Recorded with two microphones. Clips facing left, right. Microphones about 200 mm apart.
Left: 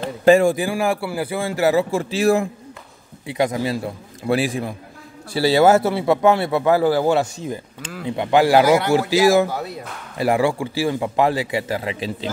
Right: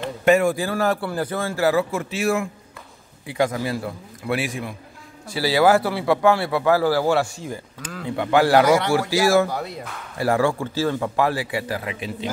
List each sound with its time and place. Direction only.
0.0 s a man's voice: 30° left (ahead or behind)
0.6 s a man's voice: 10° left (ahead or behind); by 2.5 s 35° left (ahead or behind)
3.3 s a man's voice: 20° left (ahead or behind)
4.3 s a man's voice: 35° left (ahead or behind); by 8.9 s 5° left (ahead or behind)
9.1 s speech: 15° left (ahead or behind)
9.5 s speech: centre (ahead or behind)
10.1 s a man's voice: 15° left (ahead or behind)